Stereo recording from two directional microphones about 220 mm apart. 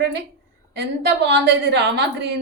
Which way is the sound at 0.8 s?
50° right (ahead or behind).